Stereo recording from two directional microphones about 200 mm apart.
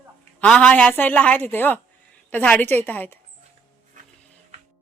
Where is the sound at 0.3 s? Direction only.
5° left (ahead or behind).